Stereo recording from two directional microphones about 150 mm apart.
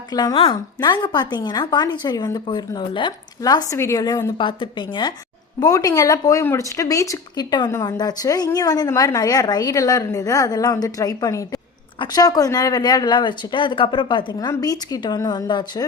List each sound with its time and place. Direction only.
0.1 s speech: 25° left (ahead or behind)